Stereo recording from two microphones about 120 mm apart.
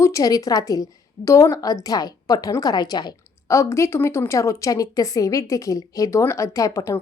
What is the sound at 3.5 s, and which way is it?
A woman's voice, 25° left (ahead or behind).